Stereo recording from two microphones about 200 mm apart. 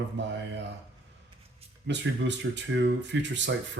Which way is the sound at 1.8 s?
60° right (ahead or behind).